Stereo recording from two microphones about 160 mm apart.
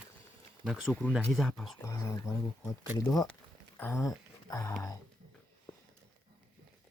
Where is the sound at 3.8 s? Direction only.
15° left (ahead or behind).